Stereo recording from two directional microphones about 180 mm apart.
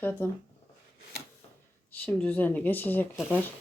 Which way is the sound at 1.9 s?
10° left (ahead or behind).